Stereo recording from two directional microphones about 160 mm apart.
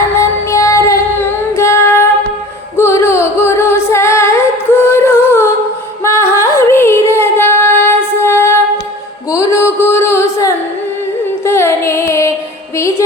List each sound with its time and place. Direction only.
0.2 s female singing: 20° left (ahead or behind)
2.7 s singing: 15° left (ahead or behind)
6.4 s music: 15° left (ahead or behind)
9.3 s a sound: 15° left (ahead or behind)
11.4 s music: 15° left (ahead or behind)